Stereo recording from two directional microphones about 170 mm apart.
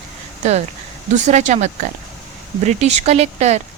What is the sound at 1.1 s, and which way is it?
Speech, 45° right (ahead or behind).